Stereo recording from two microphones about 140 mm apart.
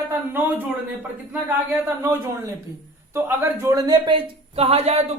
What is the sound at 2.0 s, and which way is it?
Speech, 20° right (ahead or behind).